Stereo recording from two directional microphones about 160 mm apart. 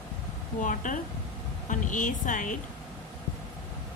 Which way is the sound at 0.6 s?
55° left (ahead or behind).